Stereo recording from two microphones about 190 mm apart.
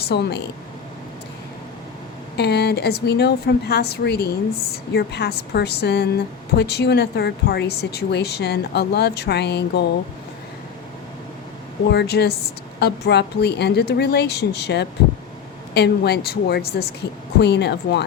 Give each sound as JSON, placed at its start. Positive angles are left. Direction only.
{"t": 0.0, "sound": "speech", "side_deg": 60}
{"t": 2.3, "sound": "speech", "side_deg": 60}
{"t": 11.9, "sound": "speech", "side_deg": 60}